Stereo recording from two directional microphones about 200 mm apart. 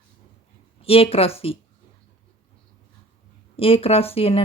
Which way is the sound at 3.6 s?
30° left (ahead or behind).